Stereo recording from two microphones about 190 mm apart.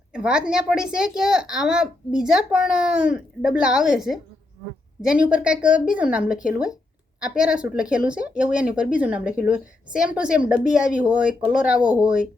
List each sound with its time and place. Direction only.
0.1 s a woman's voice: 5° right (ahead or behind)